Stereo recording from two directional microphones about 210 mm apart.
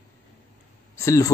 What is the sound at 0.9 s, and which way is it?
Speech, 15° left (ahead or behind).